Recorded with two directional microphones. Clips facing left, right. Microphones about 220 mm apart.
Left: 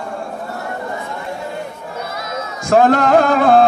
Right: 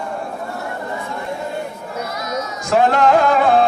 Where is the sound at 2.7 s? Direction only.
45° left (ahead or behind).